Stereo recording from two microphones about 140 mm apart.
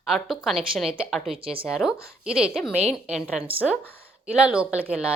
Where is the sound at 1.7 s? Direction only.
5° right (ahead or behind).